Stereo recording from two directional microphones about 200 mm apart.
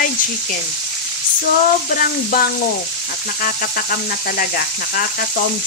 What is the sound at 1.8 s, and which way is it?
Sizzle, 45° left (ahead or behind).